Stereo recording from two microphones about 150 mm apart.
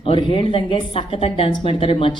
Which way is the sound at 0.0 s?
35° left (ahead or behind).